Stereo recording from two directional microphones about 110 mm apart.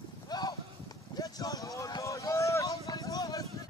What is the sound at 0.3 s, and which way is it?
Clip-clop, 35° left (ahead or behind).